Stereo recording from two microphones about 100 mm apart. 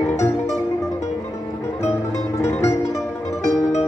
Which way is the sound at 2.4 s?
30° left (ahead or behind).